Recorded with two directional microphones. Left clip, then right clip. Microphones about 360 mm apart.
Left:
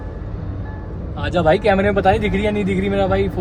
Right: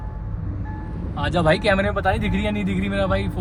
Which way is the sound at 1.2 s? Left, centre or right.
Centre.